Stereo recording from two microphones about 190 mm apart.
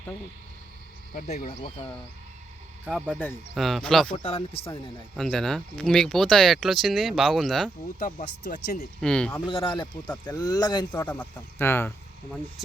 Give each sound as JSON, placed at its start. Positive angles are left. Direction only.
{"t": 1.1, "sound": "speech", "side_deg": 45}
{"t": 2.8, "sound": "speech", "side_deg": -5}
{"t": 4.2, "sound": "speech", "side_deg": 35}
{"t": 5.1, "sound": "speech", "side_deg": 0}
{"t": 7.9, "sound": "speech", "side_deg": 50}
{"t": 9.0, "sound": "speech", "side_deg": 5}
{"t": 9.5, "sound": "speech", "side_deg": 25}
{"t": 10.9, "sound": "speech", "side_deg": 10}